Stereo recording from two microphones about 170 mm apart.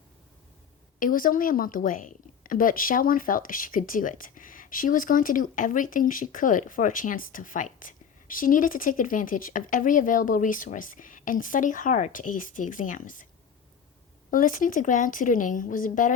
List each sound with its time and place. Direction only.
0.9 s a woman's voice: 55° left (ahead or behind)
14.3 s a woman's voice: 55° left (ahead or behind)